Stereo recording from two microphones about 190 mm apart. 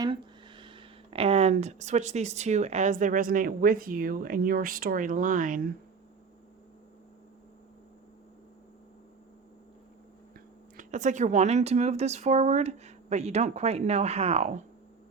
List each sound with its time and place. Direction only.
0.0 s speech: 25° right (ahead or behind); by 5.6 s 45° right (ahead or behind)
10.8 s speech: 40° right (ahead or behind)